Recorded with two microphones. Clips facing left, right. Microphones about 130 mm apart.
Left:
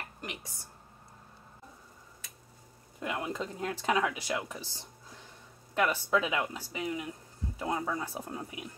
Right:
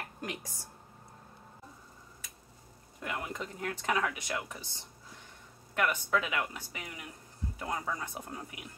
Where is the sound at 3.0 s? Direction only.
20° left (ahead or behind).